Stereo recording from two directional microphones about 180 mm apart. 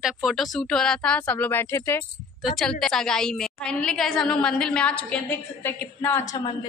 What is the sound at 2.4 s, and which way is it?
A woman's voice, centre (ahead or behind).